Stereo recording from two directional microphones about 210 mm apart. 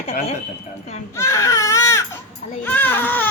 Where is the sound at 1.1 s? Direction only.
15° left (ahead or behind).